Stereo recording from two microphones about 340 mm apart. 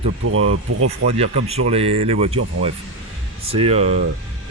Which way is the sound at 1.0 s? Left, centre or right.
Centre.